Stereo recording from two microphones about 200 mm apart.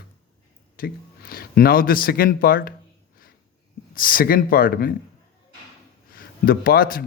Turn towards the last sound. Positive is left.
turn(degrees=45)  # may be behind; listen again after turning